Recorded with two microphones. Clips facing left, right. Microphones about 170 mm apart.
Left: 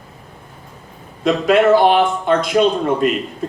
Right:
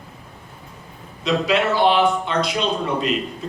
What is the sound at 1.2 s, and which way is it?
A man's voice, 50° left (ahead or behind).